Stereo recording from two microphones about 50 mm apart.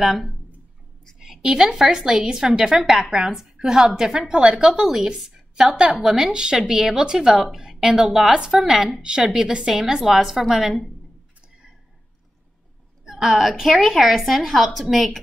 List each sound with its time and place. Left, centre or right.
0.0 s a woman's voice: centre
1.2 s a woman's voice: centre
13.1 s a woman's voice: centre